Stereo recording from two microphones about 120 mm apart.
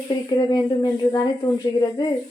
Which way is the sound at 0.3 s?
35° left (ahead or behind).